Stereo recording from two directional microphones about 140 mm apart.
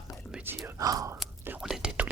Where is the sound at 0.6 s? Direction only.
25° right (ahead or behind).